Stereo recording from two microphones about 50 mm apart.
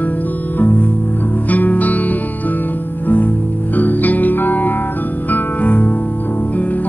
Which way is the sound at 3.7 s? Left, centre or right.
Left.